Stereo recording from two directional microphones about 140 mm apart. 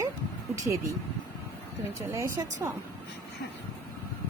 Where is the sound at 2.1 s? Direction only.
20° right (ahead or behind).